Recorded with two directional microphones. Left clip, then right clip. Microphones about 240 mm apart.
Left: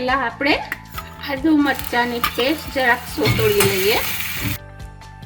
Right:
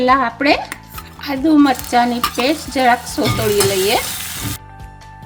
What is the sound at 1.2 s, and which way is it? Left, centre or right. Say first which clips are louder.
Stir: right 4 dB; right.